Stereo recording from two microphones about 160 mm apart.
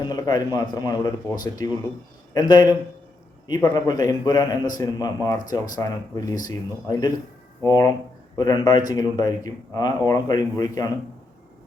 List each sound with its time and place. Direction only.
0.0 s a man's voice: 25° left (ahead or behind)